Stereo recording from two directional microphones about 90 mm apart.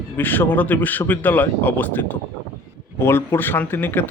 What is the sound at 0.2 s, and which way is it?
Speech, 20° left (ahead or behind).